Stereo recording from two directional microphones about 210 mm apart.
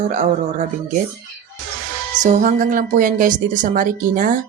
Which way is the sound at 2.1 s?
35° right (ahead or behind).